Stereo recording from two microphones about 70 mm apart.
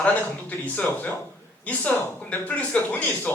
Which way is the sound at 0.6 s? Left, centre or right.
Left.